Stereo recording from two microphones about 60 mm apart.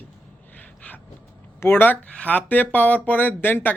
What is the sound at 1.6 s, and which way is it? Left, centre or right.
Speech, left.